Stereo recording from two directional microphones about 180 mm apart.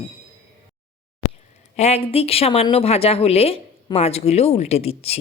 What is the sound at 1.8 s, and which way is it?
A woman's voice, 35° left (ahead or behind).